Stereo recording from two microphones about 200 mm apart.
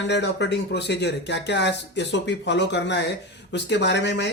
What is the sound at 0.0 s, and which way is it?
A man's voice, 60° left (ahead or behind).